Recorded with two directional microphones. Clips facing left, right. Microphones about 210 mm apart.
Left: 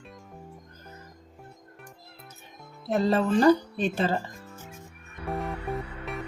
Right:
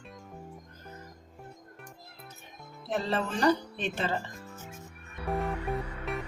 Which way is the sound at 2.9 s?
40° left (ahead or behind).